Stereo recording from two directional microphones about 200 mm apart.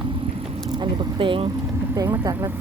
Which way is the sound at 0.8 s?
25° right (ahead or behind).